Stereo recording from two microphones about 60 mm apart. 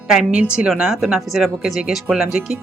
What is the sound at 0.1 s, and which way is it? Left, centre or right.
Speech, centre.